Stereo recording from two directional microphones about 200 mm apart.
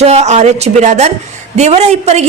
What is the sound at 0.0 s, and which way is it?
A woman's voice, 35° right (ahead or behind).